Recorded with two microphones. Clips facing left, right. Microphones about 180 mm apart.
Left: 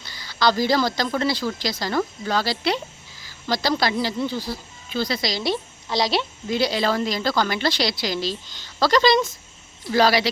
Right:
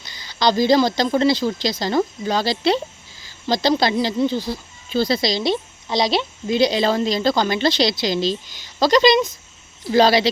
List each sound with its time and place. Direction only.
0.0 s a woman's voice: 20° right (ahead or behind)
4.9 s a woman's voice: 30° right (ahead or behind)